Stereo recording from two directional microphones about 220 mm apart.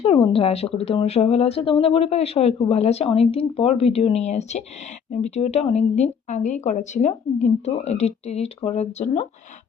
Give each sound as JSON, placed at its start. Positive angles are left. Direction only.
{"t": 0.0, "sound": "speech", "side_deg": 25}